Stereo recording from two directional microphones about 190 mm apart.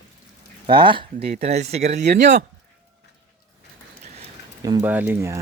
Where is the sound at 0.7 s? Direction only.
25° right (ahead or behind).